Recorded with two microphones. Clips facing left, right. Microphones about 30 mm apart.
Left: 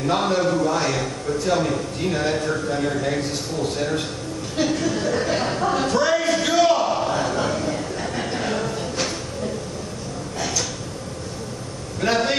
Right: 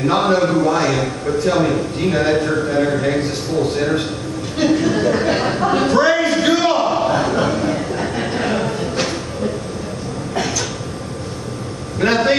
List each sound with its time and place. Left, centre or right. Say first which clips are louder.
0.0 s a man's voice: right 5 dB; right
4.6 s a sound: right 6 dB; centre
12.0 s a man's voice: right 5 dB; right